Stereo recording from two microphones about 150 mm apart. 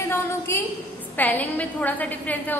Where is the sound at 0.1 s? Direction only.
15° left (ahead or behind).